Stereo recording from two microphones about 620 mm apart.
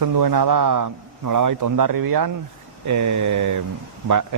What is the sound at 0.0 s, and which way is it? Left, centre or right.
A man's voice, right.